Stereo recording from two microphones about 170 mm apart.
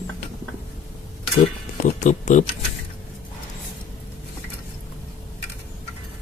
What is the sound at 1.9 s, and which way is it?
Speech, 50° left (ahead or behind).